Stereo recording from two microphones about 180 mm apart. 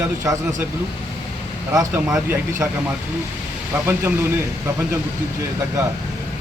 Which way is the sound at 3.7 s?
10° right (ahead or behind).